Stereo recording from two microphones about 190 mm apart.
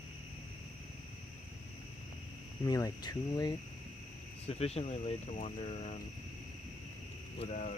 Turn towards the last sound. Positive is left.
turn(degrees=40)  # may be behind; listen again after turning